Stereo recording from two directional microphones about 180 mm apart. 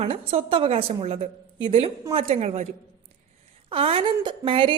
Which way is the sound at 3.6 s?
30° right (ahead or behind).